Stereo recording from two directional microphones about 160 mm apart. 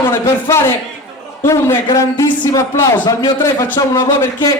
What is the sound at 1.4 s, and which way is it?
A man's voice, 20° left (ahead or behind).